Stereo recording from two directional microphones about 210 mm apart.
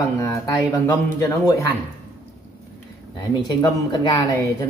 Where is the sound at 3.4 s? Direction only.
20° left (ahead or behind).